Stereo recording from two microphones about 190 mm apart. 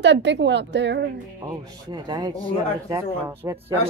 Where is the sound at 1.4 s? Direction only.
20° right (ahead or behind).